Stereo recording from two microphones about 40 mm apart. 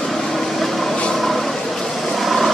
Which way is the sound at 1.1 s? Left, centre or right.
Centre.